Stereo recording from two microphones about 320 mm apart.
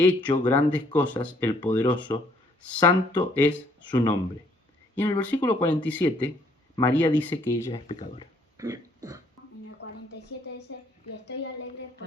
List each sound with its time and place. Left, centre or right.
0.3 s speech: centre
7.7 s speech: centre
8.5 s throat clearing: centre
10.1 s a sound: left